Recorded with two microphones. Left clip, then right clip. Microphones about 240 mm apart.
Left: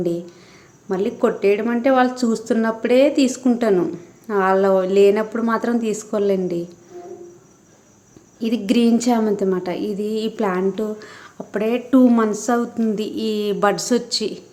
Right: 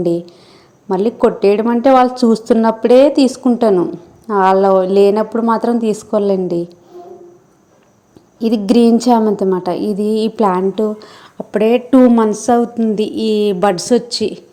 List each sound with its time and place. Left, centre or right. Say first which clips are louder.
0.9 s a woman's voice: right 6 dB; centre
8.4 s a woman's voice: right 7 dB; centre